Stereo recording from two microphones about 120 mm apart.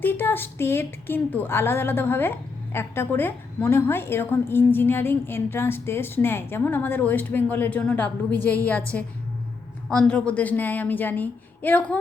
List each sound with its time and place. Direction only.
0.0 s a woman's voice: 15° left (ahead or behind)
9.9 s a woman's voice: 10° left (ahead or behind)